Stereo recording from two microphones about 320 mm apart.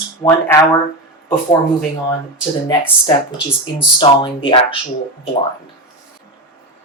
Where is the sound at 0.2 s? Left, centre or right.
Centre.